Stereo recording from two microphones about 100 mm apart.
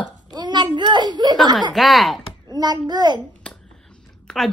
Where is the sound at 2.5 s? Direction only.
45° right (ahead or behind).